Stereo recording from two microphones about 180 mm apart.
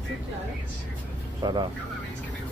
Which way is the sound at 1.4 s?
25° right (ahead or behind).